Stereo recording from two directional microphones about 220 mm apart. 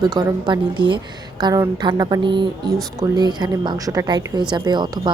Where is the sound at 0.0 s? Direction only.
15° right (ahead or behind).